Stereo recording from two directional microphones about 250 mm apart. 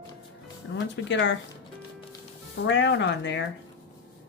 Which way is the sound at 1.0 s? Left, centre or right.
Left.